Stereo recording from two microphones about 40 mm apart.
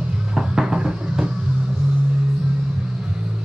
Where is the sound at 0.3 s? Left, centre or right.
Centre.